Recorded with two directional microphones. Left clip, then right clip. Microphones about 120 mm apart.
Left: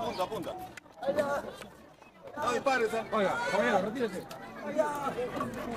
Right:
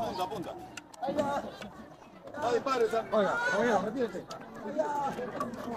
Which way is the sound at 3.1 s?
45° left (ahead or behind).